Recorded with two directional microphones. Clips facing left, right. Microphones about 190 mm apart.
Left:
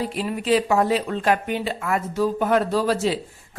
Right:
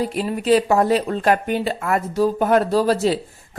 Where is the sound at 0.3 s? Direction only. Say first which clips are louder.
Right 3 dB; 40° right (ahead or behind).